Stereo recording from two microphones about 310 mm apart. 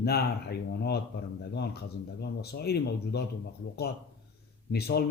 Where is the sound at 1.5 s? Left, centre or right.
Left.